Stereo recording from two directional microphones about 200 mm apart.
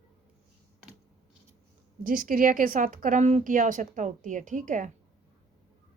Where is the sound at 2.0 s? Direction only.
45° right (ahead or behind).